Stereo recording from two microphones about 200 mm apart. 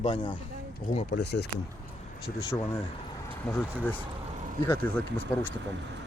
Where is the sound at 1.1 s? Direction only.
55° left (ahead or behind).